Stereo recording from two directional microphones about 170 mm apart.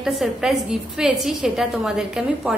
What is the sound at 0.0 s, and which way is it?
A woman's voice, centre (ahead or behind).